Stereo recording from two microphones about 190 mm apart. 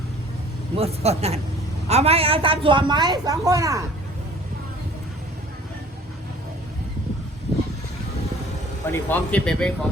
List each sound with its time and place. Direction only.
0.8 s a man's voice: 35° right (ahead or behind); by 3.8 s 15° right (ahead or behind)
8.9 s speech: 10° left (ahead or behind)